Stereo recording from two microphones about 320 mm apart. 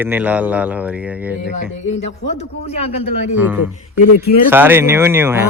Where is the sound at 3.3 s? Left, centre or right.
Centre.